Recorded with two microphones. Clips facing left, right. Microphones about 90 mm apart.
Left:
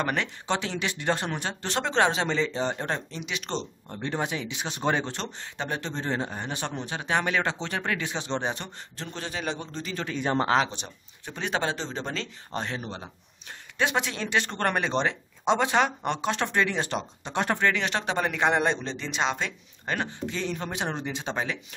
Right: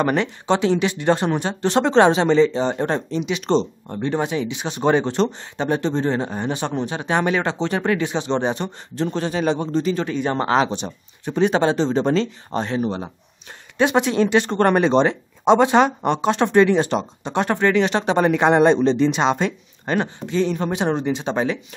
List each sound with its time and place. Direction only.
0.0 s a man's voice: 20° right (ahead or behind)
2.2 s speech: 15° right (ahead or behind)
4.0 s speech: 5° right (ahead or behind)
4.8 s a man's voice: 20° right (ahead or behind)
8.3 s a man's voice: 20° right (ahead or behind)
9.1 s speech: 40° right (ahead or behind)
9.7 s a man's voice: 30° right (ahead or behind)
9.9 s speech: 5° right (ahead or behind)
10.8 s a man's voice: 30° right (ahead or behind)
12.5 s speech: 10° right (ahead or behind)
12.8 s a man's voice: 30° right (ahead or behind)
20.0 s a man's voice: 20° right (ahead or behind)